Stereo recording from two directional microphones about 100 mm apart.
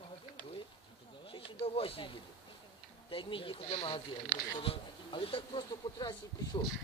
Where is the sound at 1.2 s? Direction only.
65° left (ahead or behind); by 6.6 s 45° left (ahead or behind).